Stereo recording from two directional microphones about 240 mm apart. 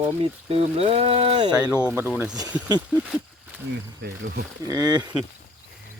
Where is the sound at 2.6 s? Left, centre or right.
Centre.